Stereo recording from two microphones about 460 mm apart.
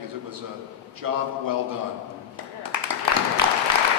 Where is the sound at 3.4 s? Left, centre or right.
Right.